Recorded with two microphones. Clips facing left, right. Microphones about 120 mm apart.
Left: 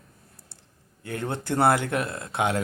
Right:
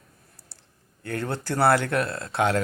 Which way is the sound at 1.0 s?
20° left (ahead or behind).